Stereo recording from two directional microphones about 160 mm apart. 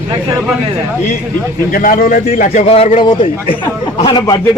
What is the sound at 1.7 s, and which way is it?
Speech, 60° left (ahead or behind).